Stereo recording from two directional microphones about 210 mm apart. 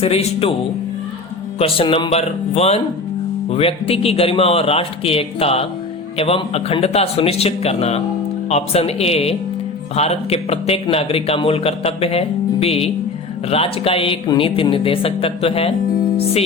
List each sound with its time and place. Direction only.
0.0 s speech: 30° left (ahead or behind)
1.5 s speech: 25° left (ahead or behind)
16.1 s music: 30° left (ahead or behind)